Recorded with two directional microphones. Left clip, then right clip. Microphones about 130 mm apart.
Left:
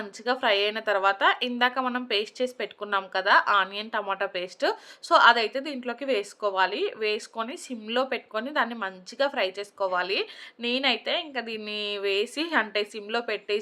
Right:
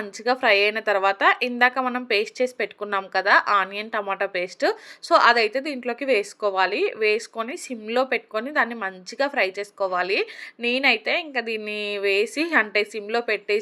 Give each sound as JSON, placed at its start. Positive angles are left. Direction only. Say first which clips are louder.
{"t": 0.3, "sound": "speech", "louder": "right 5 dB", "side_deg": -30}